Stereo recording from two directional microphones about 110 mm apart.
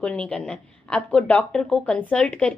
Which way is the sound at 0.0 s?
10° left (ahead or behind).